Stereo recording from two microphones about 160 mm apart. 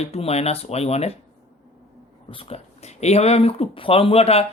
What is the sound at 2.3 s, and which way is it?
Speech, 35° left (ahead or behind).